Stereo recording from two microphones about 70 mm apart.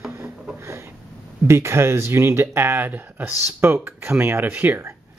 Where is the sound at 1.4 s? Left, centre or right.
Right.